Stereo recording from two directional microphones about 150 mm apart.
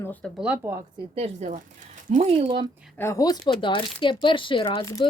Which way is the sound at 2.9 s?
20° left (ahead or behind).